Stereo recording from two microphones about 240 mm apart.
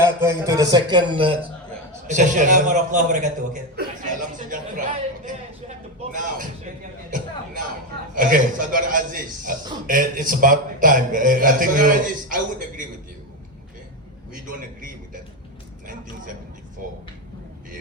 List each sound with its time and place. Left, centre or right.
0.0 s a man's voice: centre; by 3.8 s right
4.4 s a sound: right
8.1 s a man's voice: right